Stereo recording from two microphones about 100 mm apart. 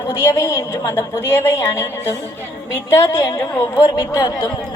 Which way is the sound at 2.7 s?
25° left (ahead or behind).